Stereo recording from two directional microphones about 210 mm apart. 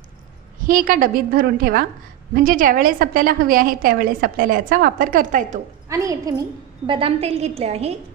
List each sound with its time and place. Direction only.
0.7 s a woman's voice: 40° right (ahead or behind)
5.9 s a woman's voice: 15° right (ahead or behind)
6.9 s a woman's voice: 25° right (ahead or behind)